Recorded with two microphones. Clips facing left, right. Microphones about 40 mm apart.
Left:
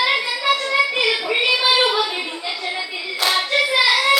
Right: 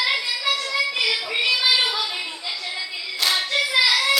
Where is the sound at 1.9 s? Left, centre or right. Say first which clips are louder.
Left 5 dB; left.